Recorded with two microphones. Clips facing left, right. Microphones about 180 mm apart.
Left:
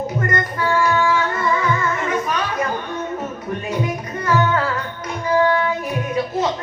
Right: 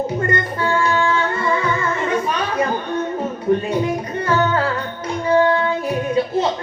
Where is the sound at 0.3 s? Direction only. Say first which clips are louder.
Right 1 dB; 30° right (ahead or behind).